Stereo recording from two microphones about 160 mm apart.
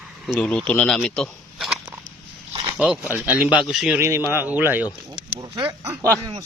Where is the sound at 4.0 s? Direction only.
15° right (ahead or behind).